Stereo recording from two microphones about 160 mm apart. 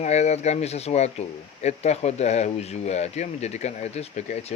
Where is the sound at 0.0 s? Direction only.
45° left (ahead or behind).